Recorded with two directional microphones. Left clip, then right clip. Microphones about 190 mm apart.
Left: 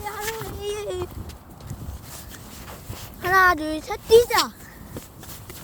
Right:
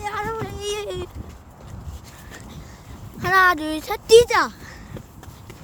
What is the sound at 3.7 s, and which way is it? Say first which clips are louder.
Speech: right 2 dB; 15° right (ahead or behind).